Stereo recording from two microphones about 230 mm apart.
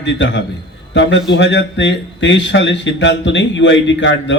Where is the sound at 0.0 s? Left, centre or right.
Left.